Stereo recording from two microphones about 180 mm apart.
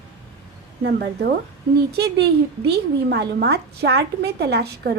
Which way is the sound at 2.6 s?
65° right (ahead or behind).